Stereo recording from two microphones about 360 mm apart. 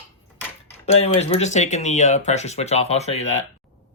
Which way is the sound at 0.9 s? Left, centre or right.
Centre.